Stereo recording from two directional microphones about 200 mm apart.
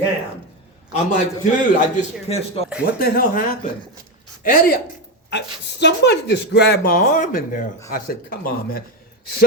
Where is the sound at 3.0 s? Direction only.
45° left (ahead or behind).